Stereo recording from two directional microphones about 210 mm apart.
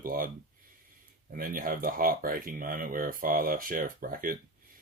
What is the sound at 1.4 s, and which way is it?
Speech, 40° right (ahead or behind).